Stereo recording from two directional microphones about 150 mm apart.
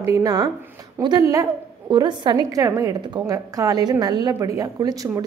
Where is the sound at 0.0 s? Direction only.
20° right (ahead or behind).